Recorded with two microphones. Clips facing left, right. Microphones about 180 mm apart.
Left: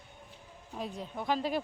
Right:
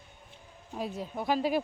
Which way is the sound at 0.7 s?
5° right (ahead or behind).